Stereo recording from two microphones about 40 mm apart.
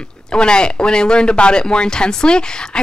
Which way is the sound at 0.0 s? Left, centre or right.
Left.